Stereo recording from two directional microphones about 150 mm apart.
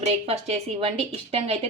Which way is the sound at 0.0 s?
45° right (ahead or behind).